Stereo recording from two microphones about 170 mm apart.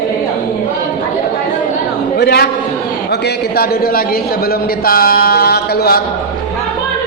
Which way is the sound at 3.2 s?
60° left (ahead or behind).